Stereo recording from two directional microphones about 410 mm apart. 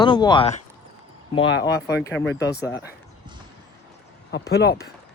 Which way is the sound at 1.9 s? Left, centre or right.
Left.